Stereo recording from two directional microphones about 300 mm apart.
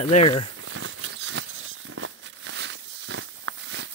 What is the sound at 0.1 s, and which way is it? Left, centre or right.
Speech, centre.